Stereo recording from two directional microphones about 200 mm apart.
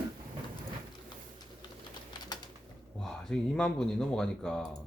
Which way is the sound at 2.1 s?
20° left (ahead or behind).